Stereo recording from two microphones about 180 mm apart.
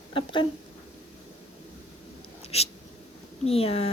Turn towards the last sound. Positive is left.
turn(degrees=30)  # may be behind; listen again after turning